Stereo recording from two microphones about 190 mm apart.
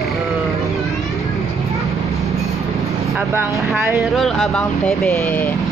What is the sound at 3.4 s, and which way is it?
Speech, 15° right (ahead or behind).